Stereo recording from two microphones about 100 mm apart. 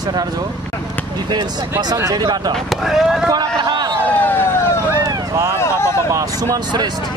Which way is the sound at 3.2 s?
45° right (ahead or behind).